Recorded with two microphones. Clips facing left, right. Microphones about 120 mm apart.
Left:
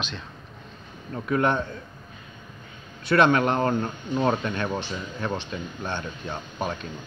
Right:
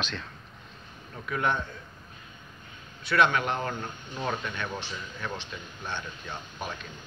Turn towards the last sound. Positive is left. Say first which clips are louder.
# left 7 dB
turn(degrees=40)  # may be behind; listen again after turning